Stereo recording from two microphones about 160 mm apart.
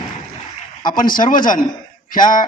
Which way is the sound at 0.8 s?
60° left (ahead or behind).